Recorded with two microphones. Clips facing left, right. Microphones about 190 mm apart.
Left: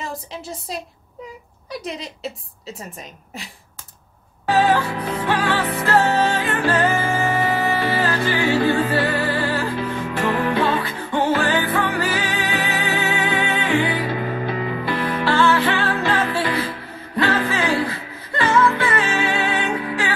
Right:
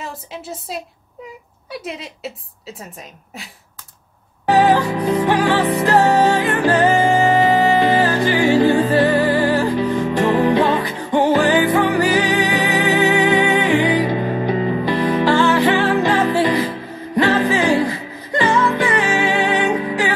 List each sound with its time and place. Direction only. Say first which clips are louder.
0.0 s a woman's voice: even; 5° right (ahead or behind)
4.5 s music: right 4 dB; 15° right (ahead or behind)